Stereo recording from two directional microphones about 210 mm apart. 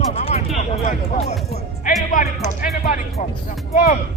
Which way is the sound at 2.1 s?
40° left (ahead or behind).